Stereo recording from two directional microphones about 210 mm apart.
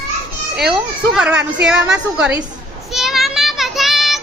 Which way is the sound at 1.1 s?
5° right (ahead or behind).